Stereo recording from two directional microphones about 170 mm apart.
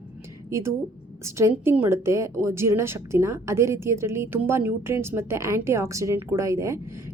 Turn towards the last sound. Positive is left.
turn(degrees=-15)  # may be behind; listen again after turning